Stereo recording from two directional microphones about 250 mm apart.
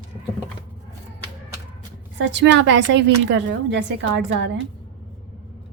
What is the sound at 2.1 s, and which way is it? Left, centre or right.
Speech, right.